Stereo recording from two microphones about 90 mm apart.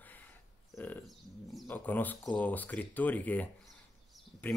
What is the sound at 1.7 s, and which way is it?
Speech, 20° left (ahead or behind).